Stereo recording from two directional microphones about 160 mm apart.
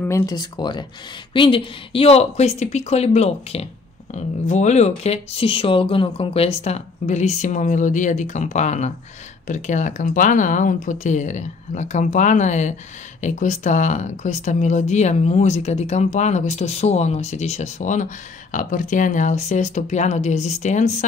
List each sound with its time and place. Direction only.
0.3 s a woman's voice: 25° left (ahead or behind); by 20.9 s 45° left (ahead or behind)